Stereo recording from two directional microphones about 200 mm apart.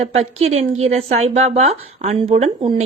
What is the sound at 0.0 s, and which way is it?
A woman's voice, 30° right (ahead or behind).